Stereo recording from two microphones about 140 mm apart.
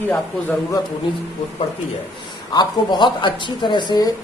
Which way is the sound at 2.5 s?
30° left (ahead or behind).